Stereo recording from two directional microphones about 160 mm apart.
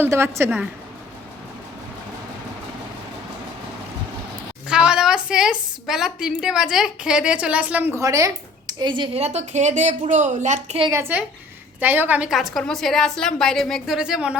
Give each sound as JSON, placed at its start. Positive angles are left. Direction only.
{"t": 0.0, "sound": "a woman's voice", "side_deg": -15}
{"t": 4.7, "sound": "a woman's voice", "side_deg": -5}
{"t": 7.9, "sound": "speech", "side_deg": -20}
{"t": 9.2, "sound": "a woman's voice", "side_deg": -45}
{"t": 11.8, "sound": "a woman's voice", "side_deg": -10}